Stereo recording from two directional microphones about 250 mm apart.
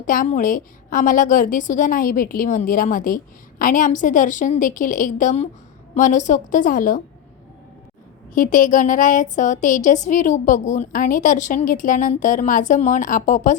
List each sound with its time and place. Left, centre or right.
0.0 s a woman's voice: left
8.3 s a woman's voice: left